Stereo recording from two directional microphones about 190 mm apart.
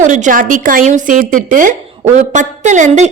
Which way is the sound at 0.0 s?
40° right (ahead or behind).